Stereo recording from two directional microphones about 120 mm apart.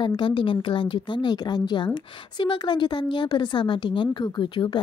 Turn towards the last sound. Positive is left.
turn(degrees=40)  # may be behind; listen again after turning